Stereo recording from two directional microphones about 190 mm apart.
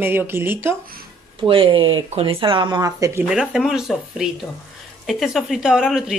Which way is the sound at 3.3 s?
5° right (ahead or behind).